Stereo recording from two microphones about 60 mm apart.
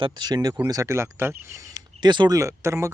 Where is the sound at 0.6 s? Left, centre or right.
Right.